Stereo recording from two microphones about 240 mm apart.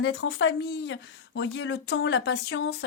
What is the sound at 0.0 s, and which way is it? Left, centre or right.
Speech, left.